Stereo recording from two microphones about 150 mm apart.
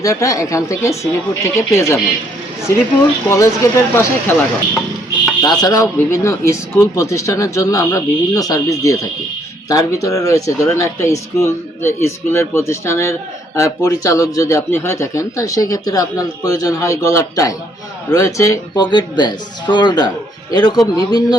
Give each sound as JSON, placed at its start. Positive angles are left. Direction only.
{"t": 0.0, "sound": "a man's voice", "side_deg": 20}
{"t": 3.2, "sound": "a man's voice", "side_deg": 20}
{"t": 5.4, "sound": "a man's voice", "side_deg": 25}